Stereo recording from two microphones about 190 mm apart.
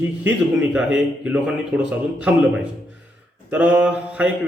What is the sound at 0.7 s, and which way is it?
A man's voice, 5° right (ahead or behind).